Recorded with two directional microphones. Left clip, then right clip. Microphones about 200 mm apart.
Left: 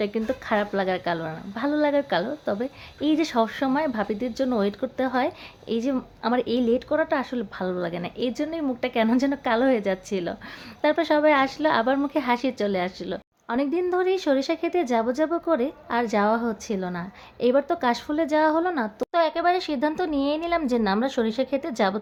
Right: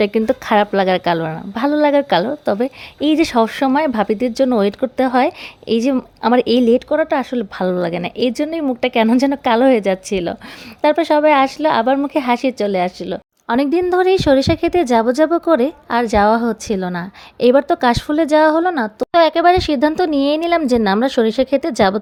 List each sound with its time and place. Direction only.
0.0 s a woman's voice: 45° right (ahead or behind)